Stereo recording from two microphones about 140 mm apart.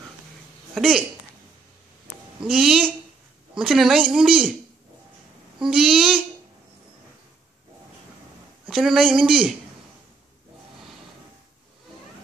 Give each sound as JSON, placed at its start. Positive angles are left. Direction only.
{"t": 0.7, "sound": "speech", "side_deg": 0}
{"t": 2.4, "sound": "speech", "side_deg": -5}
{"t": 5.6, "sound": "speech", "side_deg": -5}
{"t": 8.6, "sound": "speech", "side_deg": 0}